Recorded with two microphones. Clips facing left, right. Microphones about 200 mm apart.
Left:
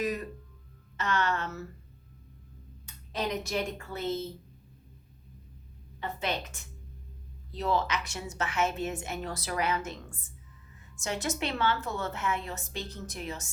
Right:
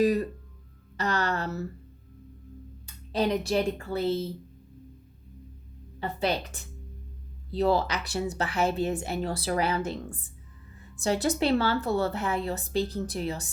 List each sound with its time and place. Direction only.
0.0 s a woman's voice: 35° right (ahead or behind)
2.8 s speech: 35° right (ahead or behind)
6.0 s a woman's voice: 35° right (ahead or behind)